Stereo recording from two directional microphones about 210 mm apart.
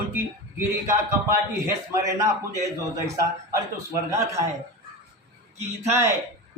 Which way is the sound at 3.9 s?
15° right (ahead or behind).